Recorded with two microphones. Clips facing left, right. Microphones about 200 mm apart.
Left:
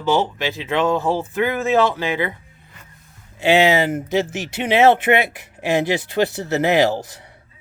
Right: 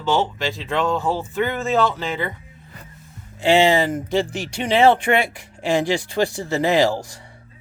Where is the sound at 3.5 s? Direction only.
5° left (ahead or behind).